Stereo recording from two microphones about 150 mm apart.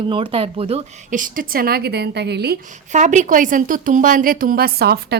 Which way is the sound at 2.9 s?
55° right (ahead or behind).